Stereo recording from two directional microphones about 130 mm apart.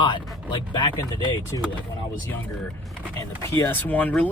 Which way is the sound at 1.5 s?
30° left (ahead or behind).